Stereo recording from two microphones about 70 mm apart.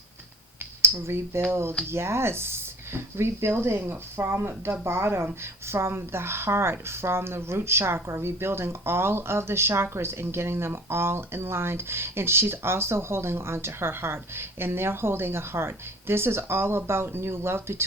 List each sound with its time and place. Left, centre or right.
0.8 s a woman's voice: right